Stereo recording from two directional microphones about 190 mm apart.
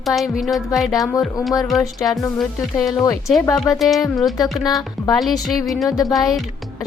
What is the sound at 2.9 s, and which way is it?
Speech, 15° left (ahead or behind).